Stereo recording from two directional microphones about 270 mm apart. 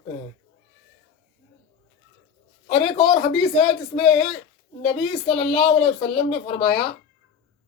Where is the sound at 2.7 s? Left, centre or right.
Centre.